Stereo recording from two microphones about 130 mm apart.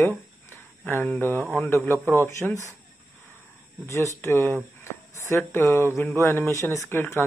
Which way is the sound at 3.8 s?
20° left (ahead or behind).